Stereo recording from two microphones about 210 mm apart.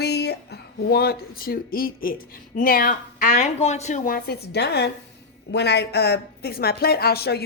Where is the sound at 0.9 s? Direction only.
50° left (ahead or behind).